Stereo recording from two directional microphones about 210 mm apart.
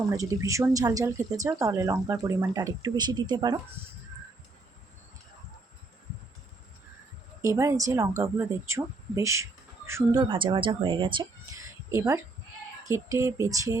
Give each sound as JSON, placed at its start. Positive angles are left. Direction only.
{"t": 0.1, "sound": "speech", "side_deg": -15}
{"t": 7.4, "sound": "speech", "side_deg": -15}